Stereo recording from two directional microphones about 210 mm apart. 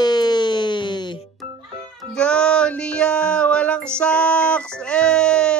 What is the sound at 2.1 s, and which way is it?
Music, 5° left (ahead or behind).